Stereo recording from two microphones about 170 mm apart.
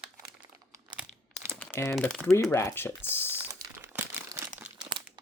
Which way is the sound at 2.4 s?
15° left (ahead or behind).